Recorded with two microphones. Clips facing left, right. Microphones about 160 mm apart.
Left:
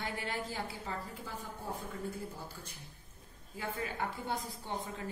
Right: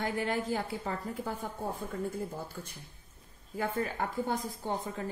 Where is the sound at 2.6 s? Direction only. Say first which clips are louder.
Right 5 dB; 55° right (ahead or behind).